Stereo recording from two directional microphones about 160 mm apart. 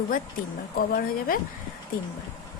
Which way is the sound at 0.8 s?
65° left (ahead or behind).